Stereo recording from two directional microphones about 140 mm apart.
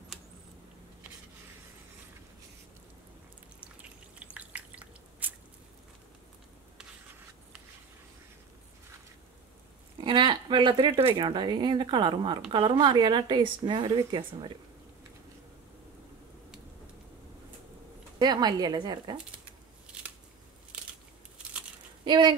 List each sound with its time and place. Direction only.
4.2 s drip: 10° right (ahead or behind)
9.9 s speech: 35° right (ahead or behind)
18.2 s a woman's voice: 30° right (ahead or behind)
22.0 s speech: 30° right (ahead or behind)